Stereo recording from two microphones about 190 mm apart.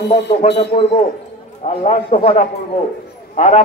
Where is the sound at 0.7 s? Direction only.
30° left (ahead or behind).